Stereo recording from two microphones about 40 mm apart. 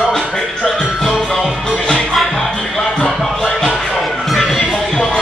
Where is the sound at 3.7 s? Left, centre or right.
Centre.